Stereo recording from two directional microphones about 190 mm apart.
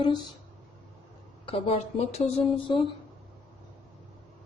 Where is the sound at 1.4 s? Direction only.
30° left (ahead or behind).